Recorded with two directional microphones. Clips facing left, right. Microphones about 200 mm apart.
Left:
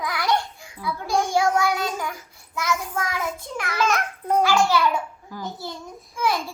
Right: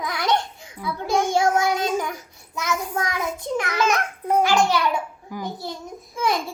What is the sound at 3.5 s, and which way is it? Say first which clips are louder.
A child's voice: right 2 dB; 20° right (ahead or behind).